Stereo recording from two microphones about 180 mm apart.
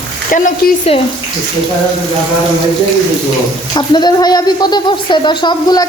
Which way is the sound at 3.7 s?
25° left (ahead or behind).